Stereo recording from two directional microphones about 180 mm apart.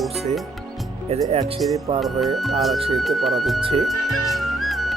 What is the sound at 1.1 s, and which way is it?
Speech, 35° right (ahead or behind).